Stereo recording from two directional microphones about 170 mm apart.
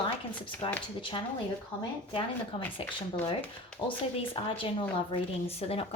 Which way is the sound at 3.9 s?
30° left (ahead or behind).